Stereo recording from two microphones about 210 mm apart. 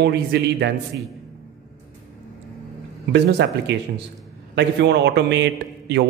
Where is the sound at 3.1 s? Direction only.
55° right (ahead or behind).